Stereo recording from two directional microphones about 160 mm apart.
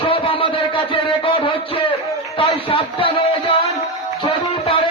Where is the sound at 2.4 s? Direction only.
35° left (ahead or behind).